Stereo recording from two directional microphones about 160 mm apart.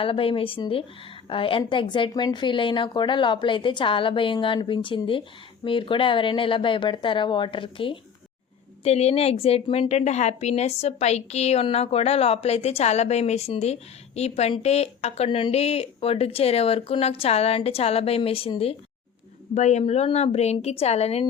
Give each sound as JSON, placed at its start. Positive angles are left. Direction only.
{"t": 0.0, "sound": "a woman's voice", "side_deg": 35}